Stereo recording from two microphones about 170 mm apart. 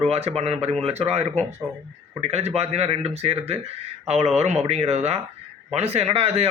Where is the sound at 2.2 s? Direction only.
40° right (ahead or behind).